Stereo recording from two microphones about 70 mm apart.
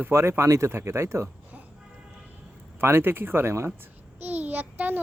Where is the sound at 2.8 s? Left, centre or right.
Right.